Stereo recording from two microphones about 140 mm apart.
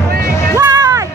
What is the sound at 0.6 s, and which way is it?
Music, 30° right (ahead or behind).